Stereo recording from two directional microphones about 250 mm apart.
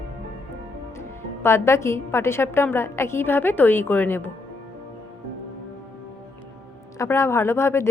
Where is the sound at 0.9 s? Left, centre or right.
Centre.